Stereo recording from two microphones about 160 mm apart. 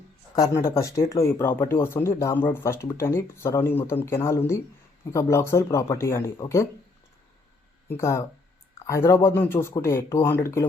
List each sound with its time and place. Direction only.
0.3 s speech: 20° left (ahead or behind)
7.9 s speech: 15° left (ahead or behind)